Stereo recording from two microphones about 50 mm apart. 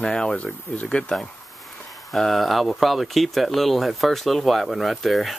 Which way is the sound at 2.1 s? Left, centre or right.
Centre.